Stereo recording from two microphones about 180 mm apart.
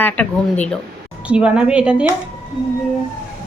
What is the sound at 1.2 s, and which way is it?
Speech, 5° right (ahead or behind).